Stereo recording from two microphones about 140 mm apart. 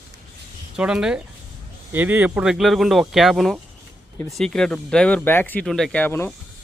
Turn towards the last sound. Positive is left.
turn(degrees=15)  # may be behind; listen again after turning